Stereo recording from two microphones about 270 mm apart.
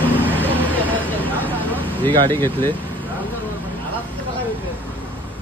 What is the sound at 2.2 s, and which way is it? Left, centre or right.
Speech, centre.